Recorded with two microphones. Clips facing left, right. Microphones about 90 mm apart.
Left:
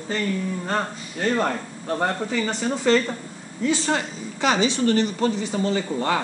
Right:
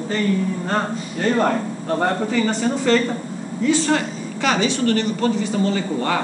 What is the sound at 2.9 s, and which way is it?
Speech, 15° left (ahead or behind).